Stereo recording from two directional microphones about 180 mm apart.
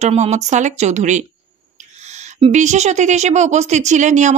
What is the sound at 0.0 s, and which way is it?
A woman's voice, 40° right (ahead or behind).